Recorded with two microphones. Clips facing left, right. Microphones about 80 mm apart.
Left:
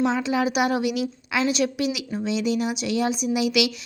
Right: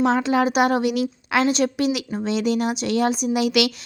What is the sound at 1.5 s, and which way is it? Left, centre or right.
A woman's voice, right.